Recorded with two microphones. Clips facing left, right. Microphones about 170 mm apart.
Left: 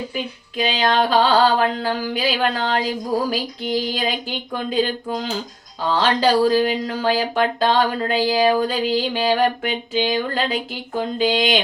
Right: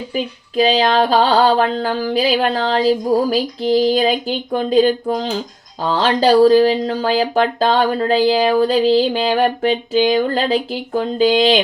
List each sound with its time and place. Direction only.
0.1 s speech: 40° right (ahead or behind)